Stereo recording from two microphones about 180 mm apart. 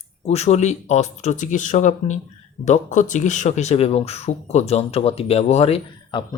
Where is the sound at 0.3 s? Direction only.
35° left (ahead or behind).